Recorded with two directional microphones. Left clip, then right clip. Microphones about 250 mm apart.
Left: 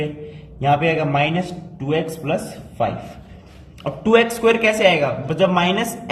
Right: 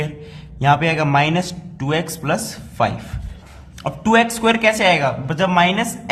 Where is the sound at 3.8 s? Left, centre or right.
Right.